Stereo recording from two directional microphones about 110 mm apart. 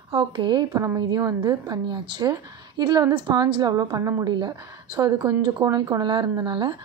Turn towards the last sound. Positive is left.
turn(degrees=-45)  # may be behind; listen again after turning